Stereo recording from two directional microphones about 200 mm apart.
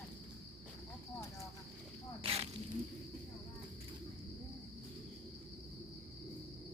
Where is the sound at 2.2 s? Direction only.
30° right (ahead or behind).